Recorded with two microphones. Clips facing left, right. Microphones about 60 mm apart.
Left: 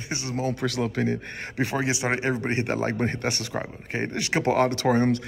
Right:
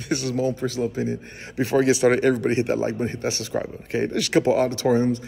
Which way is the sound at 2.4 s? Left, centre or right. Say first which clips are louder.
Right 4 dB; left.